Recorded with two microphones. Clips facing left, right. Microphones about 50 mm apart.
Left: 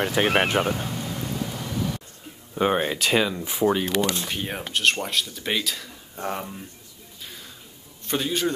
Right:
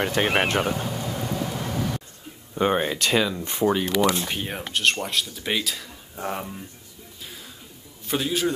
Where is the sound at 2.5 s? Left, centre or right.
Centre.